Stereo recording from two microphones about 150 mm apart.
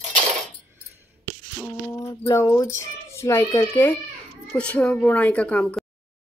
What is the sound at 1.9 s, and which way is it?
A child's voice, 20° left (ahead or behind).